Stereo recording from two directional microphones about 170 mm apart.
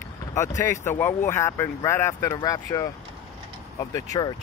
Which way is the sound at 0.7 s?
15° left (ahead or behind).